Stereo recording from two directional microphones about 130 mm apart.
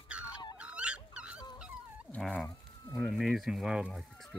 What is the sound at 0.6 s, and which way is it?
Dog, 10° right (ahead or behind).